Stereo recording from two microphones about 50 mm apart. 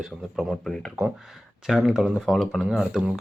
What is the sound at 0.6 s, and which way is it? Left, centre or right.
Speech, centre.